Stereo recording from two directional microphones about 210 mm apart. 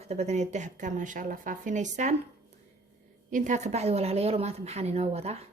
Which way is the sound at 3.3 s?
35° right (ahead or behind).